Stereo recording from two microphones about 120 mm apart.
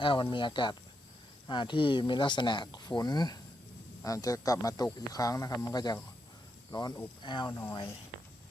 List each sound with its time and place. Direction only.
0.0 s speech: 45° left (ahead or behind)
7.5 s speech: 25° left (ahead or behind)